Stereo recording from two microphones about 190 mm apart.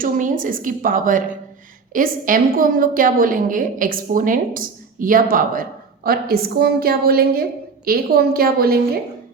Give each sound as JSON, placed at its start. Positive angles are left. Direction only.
{"t": 0.0, "sound": "a woman's voice", "side_deg": -45}